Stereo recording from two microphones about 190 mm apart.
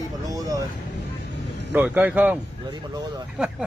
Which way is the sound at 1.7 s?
10° right (ahead or behind).